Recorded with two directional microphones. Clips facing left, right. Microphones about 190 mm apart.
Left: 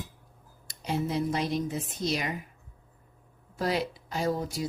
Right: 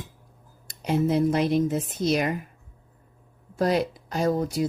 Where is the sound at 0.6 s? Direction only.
55° right (ahead or behind).